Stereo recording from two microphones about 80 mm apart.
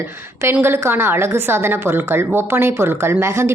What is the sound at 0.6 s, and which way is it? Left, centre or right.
A woman's voice, right.